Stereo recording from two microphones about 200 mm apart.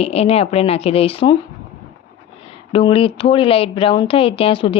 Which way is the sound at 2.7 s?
25° left (ahead or behind).